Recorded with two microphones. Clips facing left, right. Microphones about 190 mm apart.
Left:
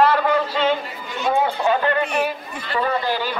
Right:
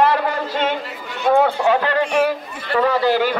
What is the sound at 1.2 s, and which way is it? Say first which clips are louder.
A man's voice: right 4 dB; 65° right (ahead or behind).